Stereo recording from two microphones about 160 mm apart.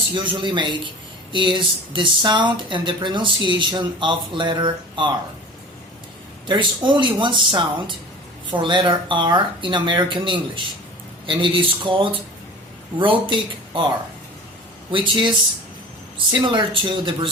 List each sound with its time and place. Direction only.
0.1 s speech: 30° right (ahead or behind)
6.5 s speech: 30° right (ahead or behind)
14.9 s speech: 30° right (ahead or behind)